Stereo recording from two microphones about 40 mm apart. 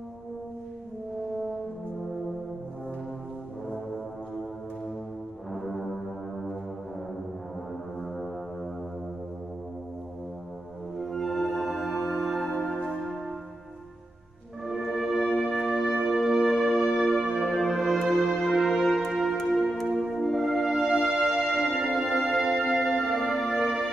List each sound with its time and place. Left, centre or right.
5.5 s music: centre
11.0 s music: centre
14.7 s music: centre
15.1 s wind instrument: centre
15.4 s music: centre